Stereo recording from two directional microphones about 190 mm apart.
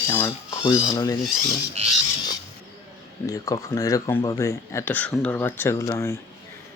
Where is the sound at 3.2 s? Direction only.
20° left (ahead or behind).